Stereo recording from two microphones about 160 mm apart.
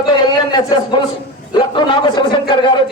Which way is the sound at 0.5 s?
30° left (ahead or behind).